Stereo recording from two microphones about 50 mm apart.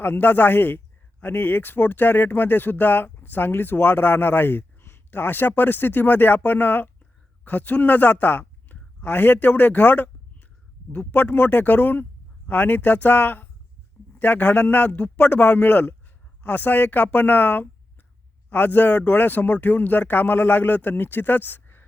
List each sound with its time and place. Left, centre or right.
0.0 s speech: left